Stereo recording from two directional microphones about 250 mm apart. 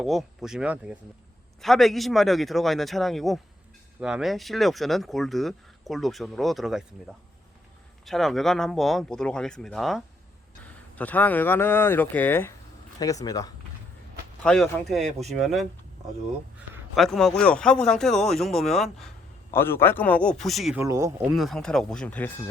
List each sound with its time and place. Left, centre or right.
0.0 s speech: centre
8.0 s speech: centre
14.4 s speech: centre
16.9 s speech: centre
20.8 s speech: centre
21.3 s speech: centre